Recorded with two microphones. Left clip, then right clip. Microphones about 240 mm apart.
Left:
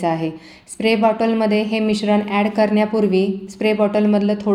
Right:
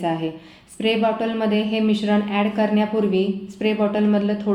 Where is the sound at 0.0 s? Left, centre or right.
Left.